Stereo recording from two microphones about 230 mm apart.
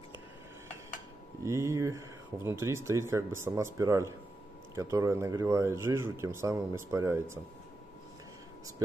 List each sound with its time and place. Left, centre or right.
1.4 s speech: centre